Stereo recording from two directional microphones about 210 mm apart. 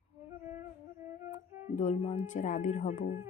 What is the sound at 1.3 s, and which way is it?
Speech, 35° left (ahead or behind).